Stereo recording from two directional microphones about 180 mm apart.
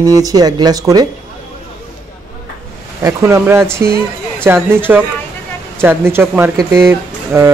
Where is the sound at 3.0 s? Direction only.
15° right (ahead or behind).